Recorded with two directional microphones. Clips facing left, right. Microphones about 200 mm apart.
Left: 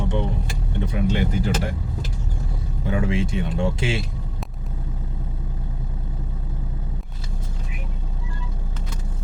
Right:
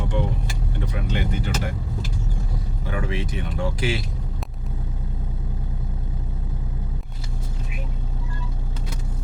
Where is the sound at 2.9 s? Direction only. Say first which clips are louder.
Left 5 dB; 25° left (ahead or behind).